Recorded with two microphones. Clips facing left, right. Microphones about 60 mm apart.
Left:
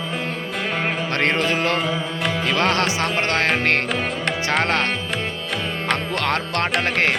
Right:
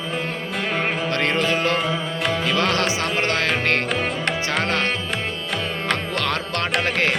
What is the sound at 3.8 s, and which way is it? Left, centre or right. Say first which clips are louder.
Music: even; centre.